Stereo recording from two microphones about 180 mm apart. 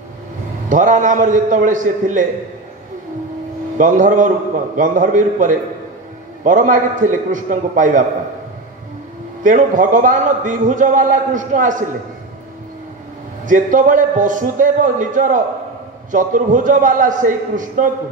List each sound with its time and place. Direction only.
0.7 s a man's voice: 45° right (ahead or behind)
3.7 s a man's voice: 45° right (ahead or behind)
9.4 s a man's voice: 45° right (ahead or behind)
13.5 s a man's voice: 45° right (ahead or behind)